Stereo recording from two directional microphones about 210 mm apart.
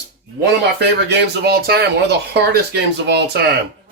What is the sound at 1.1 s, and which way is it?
A man's voice, 50° right (ahead or behind).